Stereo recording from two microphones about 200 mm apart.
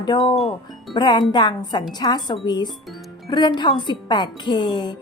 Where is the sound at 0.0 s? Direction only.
20° left (ahead or behind).